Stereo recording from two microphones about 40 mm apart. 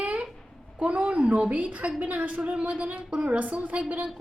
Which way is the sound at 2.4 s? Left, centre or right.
Right.